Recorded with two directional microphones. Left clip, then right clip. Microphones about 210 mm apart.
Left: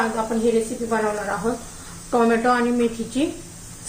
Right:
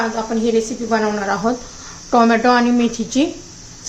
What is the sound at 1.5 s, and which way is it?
A woman's voice, 35° right (ahead or behind).